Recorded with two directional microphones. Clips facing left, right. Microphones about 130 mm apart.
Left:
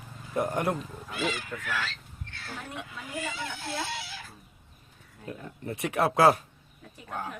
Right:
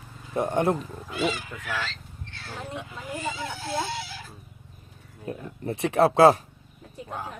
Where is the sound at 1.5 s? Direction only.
15° right (ahead or behind).